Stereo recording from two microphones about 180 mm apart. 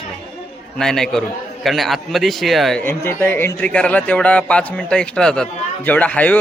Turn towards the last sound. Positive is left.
turn(degrees=10)  # may be behind; listen again after turning